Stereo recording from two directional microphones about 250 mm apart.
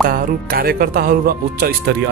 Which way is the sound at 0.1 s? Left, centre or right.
Right.